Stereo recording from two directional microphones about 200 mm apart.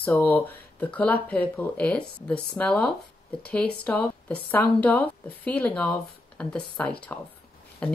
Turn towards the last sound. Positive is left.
turn(degrees=5)  # may be behind; listen again after turning